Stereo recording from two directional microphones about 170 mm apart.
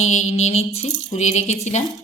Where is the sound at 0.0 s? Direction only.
40° left (ahead or behind).